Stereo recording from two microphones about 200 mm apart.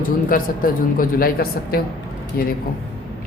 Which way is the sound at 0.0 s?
45° left (ahead or behind).